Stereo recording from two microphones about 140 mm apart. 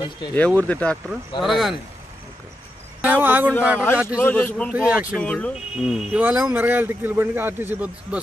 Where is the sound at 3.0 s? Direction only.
15° right (ahead or behind).